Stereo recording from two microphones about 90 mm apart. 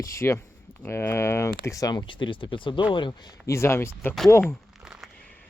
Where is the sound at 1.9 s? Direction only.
65° left (ahead or behind).